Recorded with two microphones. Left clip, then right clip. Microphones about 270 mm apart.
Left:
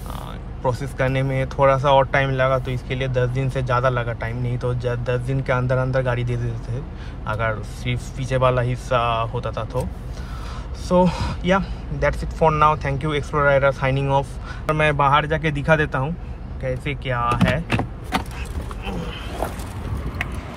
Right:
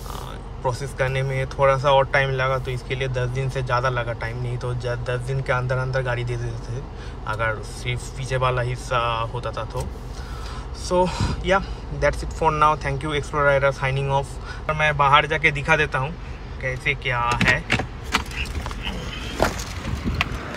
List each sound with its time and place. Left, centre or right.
0.7 s speech: centre
10.9 s speech: centre
17.6 s a sound: left